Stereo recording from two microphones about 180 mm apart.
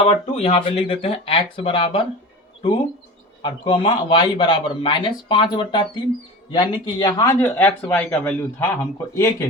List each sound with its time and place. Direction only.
0.0 s a man's voice: 35° left (ahead or behind); by 9.5 s 15° left (ahead or behind)